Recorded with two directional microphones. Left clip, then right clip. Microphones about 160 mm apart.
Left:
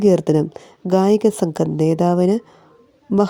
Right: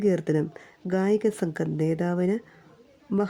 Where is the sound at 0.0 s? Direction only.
30° left (ahead or behind).